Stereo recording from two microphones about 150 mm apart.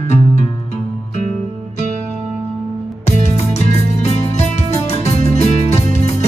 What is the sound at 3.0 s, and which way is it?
Music, 45° left (ahead or behind).